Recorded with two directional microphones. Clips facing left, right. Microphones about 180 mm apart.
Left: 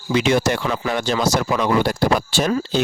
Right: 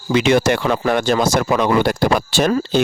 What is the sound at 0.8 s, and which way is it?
Speech, 55° right (ahead or behind).